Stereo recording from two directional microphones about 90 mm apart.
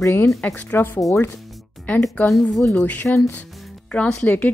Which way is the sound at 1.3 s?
Centre (ahead or behind).